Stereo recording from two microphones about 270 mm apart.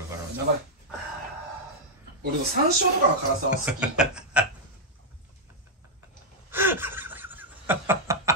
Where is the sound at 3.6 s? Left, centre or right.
Centre.